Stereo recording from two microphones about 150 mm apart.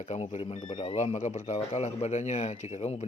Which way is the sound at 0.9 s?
55° left (ahead or behind).